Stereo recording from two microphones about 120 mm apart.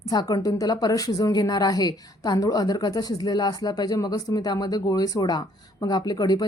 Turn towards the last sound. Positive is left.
turn(degrees=35)  # may be behind; listen again after turning